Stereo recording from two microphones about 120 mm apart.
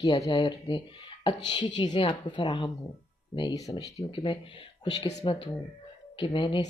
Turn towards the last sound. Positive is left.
turn(degrees=45)  # may be behind; listen again after turning